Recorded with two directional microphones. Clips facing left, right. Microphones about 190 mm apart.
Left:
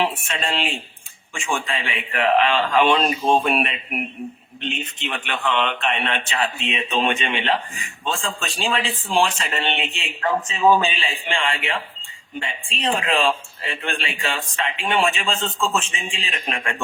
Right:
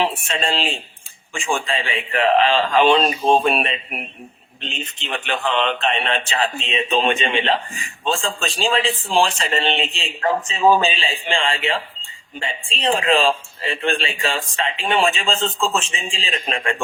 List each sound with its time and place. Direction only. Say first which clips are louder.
0.0 s a man's voice: right 2 dB; 30° right (ahead or behind)